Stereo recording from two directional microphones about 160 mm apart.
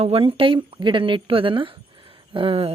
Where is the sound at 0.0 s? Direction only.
35° right (ahead or behind).